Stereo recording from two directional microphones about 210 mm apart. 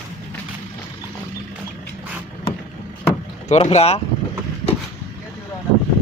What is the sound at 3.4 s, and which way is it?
Speech, 30° left (ahead or behind).